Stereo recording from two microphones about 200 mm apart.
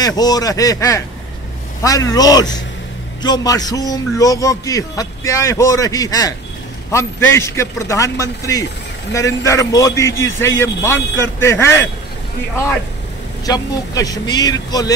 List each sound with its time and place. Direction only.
0.0 s a man's voice: 20° left (ahead or behind)
13.5 s speech: 20° left (ahead or behind)